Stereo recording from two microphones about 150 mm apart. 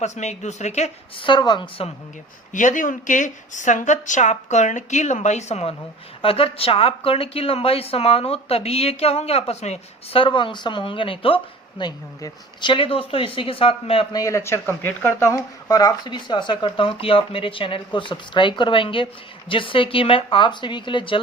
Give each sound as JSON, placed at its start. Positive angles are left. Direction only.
{"t": 0.0, "sound": "a woman's voice", "side_deg": 50}
{"t": 1.2, "sound": "speech", "side_deg": 30}
{"t": 2.5, "sound": "a woman's voice", "side_deg": 60}
{"t": 14.1, "sound": "speech", "side_deg": 20}